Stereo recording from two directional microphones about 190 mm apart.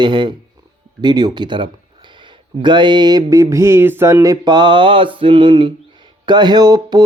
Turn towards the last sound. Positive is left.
turn(degrees=-20)  # may be behind; listen again after turning